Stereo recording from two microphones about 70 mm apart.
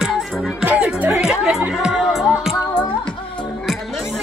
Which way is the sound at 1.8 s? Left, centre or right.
Centre.